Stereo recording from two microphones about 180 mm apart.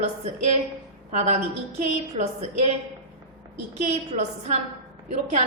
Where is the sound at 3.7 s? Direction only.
40° right (ahead or behind).